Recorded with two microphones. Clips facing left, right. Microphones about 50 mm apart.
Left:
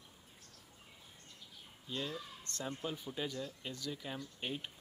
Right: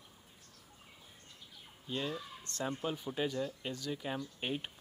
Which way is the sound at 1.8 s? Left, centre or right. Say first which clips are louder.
Right 3 dB; right.